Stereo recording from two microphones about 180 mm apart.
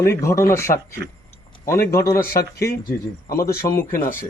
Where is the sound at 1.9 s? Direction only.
15° left (ahead or behind).